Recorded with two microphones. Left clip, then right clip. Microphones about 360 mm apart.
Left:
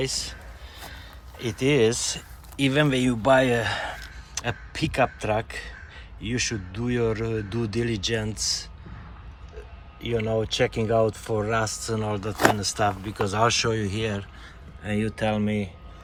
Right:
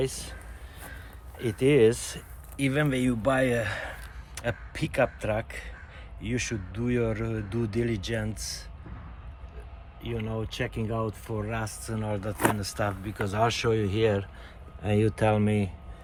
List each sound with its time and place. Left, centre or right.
0.0 s speech: centre
1.4 s speech: centre
10.0 s speech: centre
14.8 s speech: centre